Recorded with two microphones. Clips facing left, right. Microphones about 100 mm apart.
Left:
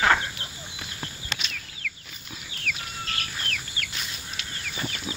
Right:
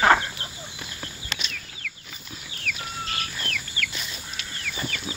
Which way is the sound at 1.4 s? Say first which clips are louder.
Even; 50° right (ahead or behind).